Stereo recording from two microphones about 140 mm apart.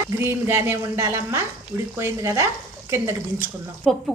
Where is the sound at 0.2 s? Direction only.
15° right (ahead or behind).